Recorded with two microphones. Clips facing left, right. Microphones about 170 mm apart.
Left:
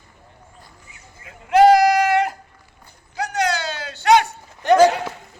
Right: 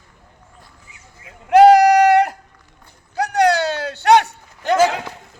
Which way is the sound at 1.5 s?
65° right (ahead or behind).